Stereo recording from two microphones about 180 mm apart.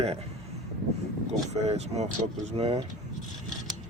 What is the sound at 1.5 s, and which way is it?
Speech, 40° right (ahead or behind).